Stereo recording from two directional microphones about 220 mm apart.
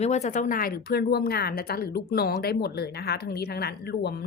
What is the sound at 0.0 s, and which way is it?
A woman's voice, 30° left (ahead or behind).